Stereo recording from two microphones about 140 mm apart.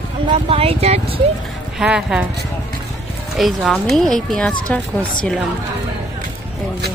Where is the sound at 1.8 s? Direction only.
5° right (ahead or behind).